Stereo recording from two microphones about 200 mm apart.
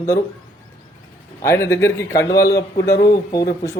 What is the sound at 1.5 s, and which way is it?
Speech, 15° left (ahead or behind).